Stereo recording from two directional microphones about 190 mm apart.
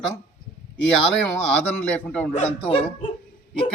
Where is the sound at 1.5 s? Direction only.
10° left (ahead or behind).